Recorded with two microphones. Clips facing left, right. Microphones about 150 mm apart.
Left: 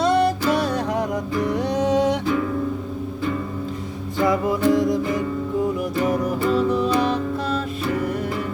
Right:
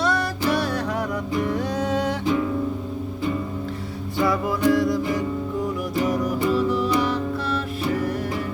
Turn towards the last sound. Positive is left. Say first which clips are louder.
# left 2 dB
turn(degrees=20)  # may be behind; listen again after turning